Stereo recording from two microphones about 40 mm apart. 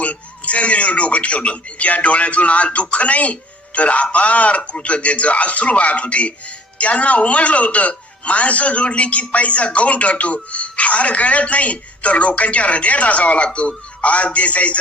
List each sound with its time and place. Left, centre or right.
0.0 s speech: left